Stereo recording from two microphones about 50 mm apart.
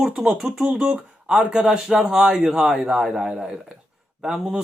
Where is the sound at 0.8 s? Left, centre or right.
Right.